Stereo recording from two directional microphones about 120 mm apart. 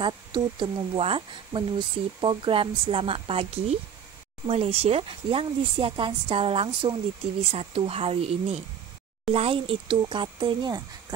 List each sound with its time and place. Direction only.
0.0 s speech: 40° right (ahead or behind)